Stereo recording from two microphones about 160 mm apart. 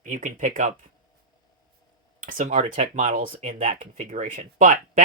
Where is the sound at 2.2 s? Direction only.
55° right (ahead or behind).